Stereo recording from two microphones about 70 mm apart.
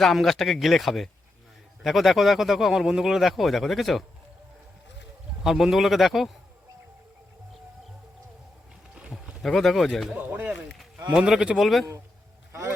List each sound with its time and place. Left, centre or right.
0.0 s speech: centre
5.4 s speech: centre
9.4 s speech: centre
10.2 s speech: right; by 11.9 s centre